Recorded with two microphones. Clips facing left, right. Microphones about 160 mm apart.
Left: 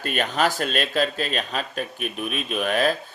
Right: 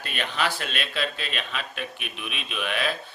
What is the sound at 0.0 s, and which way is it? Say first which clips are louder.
Speech: left 6 dB; 45° left (ahead or behind).